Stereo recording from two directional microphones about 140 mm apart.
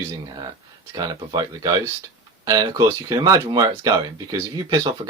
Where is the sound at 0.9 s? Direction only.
30° right (ahead or behind).